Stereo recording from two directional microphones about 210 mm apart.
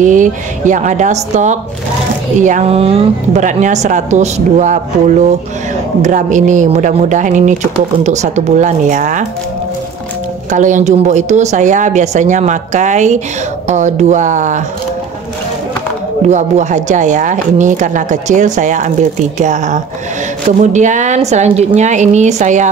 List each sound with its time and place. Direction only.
0.0 s a woman's voice: 35° right (ahead or behind)
10.5 s a woman's voice: 35° right (ahead or behind)
16.3 s a woman's voice: 35° right (ahead or behind)